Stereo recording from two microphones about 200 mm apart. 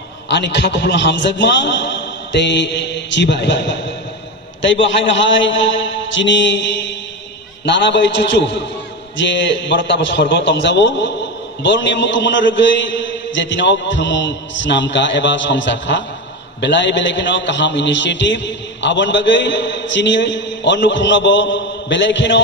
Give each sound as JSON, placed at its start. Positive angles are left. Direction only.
{"t": 0.3, "sound": "a man's voice", "side_deg": 60}
{"t": 4.8, "sound": "a man's voice", "side_deg": 70}